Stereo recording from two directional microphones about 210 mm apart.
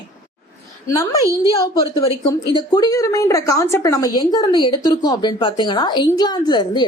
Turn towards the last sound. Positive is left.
turn(degrees=20)  # may be behind; listen again after turning